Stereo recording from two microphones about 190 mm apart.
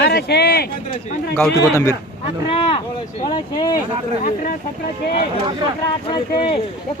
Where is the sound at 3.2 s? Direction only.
25° left (ahead or behind).